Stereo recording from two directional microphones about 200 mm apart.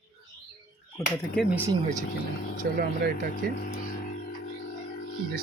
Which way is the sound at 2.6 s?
45° right (ahead or behind).